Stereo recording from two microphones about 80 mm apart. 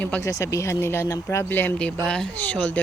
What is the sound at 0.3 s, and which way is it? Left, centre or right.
Speech, left.